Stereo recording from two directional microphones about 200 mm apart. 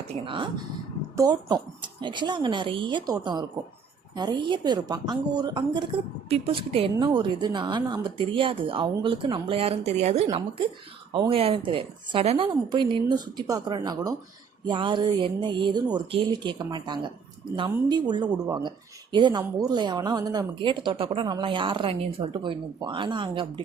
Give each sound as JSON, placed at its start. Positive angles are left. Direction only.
{"t": 0.3, "sound": "a woman's voice", "side_deg": -25}